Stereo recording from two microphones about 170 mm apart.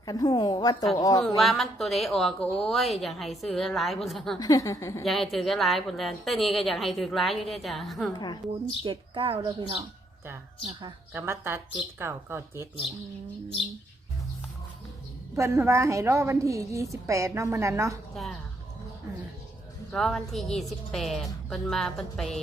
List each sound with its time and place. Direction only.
0.0 s a woman's voice: 20° left (ahead or behind)
1.4 s a woman's voice: centre (ahead or behind)
4.4 s a woman's voice: 20° left (ahead or behind)
5.0 s a woman's voice: centre (ahead or behind)
8.1 s a woman's voice: 25° left (ahead or behind)
8.8 s a woman's voice: 30° right (ahead or behind)
11.1 s a woman's voice: 15° right (ahead or behind)
15.4 s a woman's voice: 15° right (ahead or behind)
18.1 s a woman's voice: centre (ahead or behind)
19.9 s a woman's voice: centre (ahead or behind)